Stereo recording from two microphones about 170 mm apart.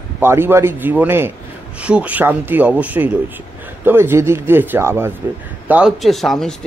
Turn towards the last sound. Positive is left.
turn(degrees=0)  # may be behind; listen again after turning